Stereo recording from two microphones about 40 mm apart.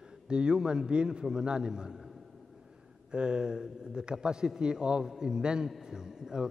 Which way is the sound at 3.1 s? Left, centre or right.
Right.